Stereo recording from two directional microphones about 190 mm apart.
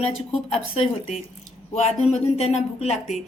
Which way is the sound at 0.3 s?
30° left (ahead or behind).